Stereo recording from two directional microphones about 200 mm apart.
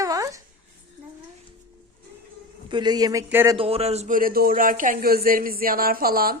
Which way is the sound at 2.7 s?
20° right (ahead or behind).